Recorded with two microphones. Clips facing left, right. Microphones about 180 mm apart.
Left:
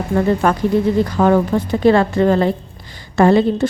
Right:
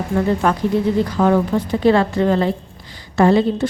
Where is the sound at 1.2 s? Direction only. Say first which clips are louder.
Left 2 dB; 45° left (ahead or behind).